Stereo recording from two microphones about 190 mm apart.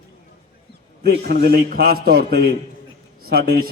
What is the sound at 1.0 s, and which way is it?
A man's voice, 55° right (ahead or behind).